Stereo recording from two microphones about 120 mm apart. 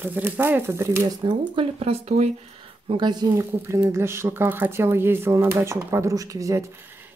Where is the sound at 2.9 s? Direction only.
40° right (ahead or behind).